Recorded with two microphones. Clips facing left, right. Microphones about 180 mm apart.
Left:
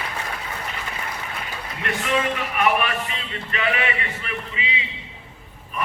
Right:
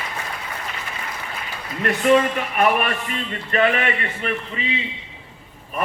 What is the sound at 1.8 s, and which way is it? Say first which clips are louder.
Speech: right 7 dB; 45° right (ahead or behind).